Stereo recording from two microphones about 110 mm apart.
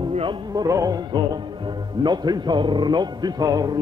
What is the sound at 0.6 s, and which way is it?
Music, 30° right (ahead or behind).